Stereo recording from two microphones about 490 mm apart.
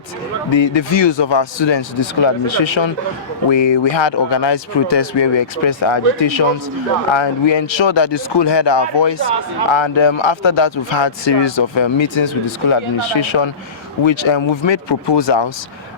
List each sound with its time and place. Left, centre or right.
0.5 s speech: left